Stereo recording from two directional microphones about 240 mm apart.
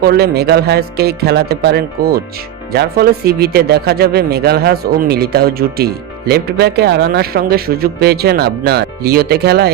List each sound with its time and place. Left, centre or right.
0.0 s speech: right